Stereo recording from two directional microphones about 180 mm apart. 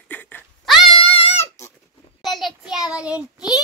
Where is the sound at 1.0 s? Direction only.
30° left (ahead or behind).